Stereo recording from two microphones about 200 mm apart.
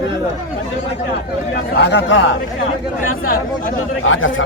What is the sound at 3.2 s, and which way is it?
Speech, 45° left (ahead or behind).